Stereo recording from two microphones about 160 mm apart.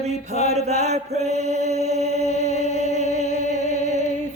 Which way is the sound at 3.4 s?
45° left (ahead or behind).